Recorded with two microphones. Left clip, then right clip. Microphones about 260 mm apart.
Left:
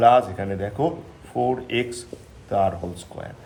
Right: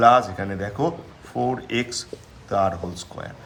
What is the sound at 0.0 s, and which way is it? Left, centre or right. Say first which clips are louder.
Speech: even; centre.